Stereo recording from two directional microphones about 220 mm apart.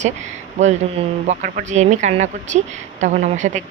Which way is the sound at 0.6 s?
35° right (ahead or behind).